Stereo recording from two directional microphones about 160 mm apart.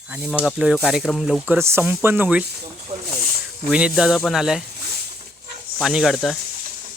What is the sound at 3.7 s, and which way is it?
Speech, 5° right (ahead or behind).